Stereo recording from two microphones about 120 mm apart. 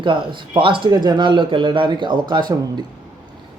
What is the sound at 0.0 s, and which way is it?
Speech, 40° right (ahead or behind).